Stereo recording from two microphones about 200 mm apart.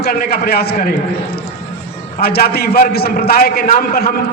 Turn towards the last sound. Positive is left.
turn(degrees=50)  # may be behind; listen again after turning